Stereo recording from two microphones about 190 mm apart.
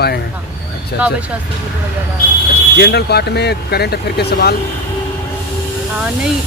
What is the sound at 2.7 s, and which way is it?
Speech, 60° left (ahead or behind).